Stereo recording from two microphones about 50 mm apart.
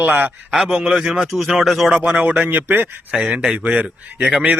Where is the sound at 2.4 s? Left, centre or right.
Right.